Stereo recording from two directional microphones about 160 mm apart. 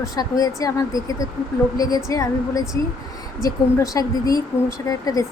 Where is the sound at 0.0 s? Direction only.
25° left (ahead or behind).